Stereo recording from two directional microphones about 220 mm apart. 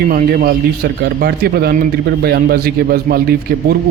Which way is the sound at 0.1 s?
40° right (ahead or behind).